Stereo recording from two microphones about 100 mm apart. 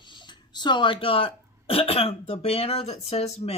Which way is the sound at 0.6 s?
50° left (ahead or behind).